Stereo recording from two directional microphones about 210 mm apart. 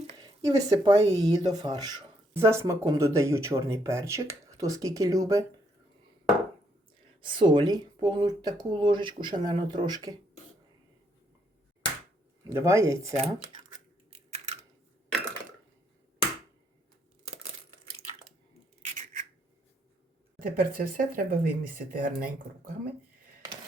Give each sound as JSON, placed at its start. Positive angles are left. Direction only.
{"t": 0.2, "sound": "speech", "side_deg": -15}
{"t": 7.2, "sound": "speech", "side_deg": -25}
{"t": 12.5, "sound": "speech", "side_deg": -15}
{"t": 13.2, "sound": "speech", "side_deg": -25}
{"t": 14.3, "sound": "a sound", "side_deg": -30}
{"t": 18.8, "sound": "a sound", "side_deg": -35}
{"t": 20.4, "sound": "speech", "side_deg": -40}